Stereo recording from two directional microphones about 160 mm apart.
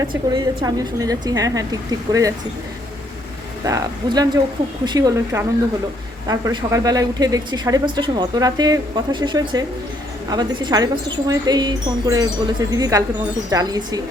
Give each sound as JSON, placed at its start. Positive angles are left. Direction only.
{"t": 0.6, "sound": "speech", "side_deg": -25}
{"t": 3.6, "sound": "speech", "side_deg": -20}